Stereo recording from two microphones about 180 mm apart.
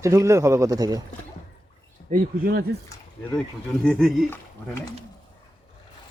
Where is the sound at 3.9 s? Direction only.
Centre (ahead or behind).